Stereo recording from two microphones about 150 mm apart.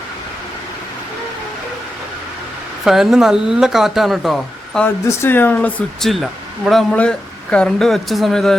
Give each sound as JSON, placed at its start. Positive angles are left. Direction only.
{"t": 2.8, "sound": "speech", "side_deg": 0}
{"t": 5.0, "sound": "speech", "side_deg": 15}